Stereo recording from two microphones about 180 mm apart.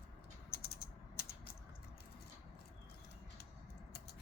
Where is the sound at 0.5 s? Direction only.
60° left (ahead or behind).